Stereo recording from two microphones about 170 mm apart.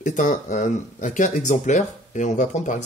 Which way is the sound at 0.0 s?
45° left (ahead or behind).